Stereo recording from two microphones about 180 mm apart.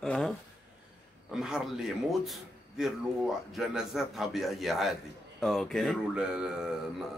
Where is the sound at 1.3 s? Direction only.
Centre (ahead or behind).